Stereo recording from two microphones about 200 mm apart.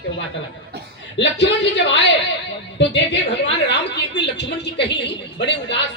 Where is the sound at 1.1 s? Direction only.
60° left (ahead or behind).